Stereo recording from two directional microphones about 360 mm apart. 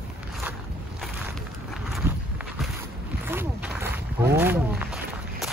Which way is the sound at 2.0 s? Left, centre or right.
Centre.